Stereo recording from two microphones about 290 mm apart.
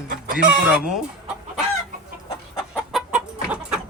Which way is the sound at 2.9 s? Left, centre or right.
Centre.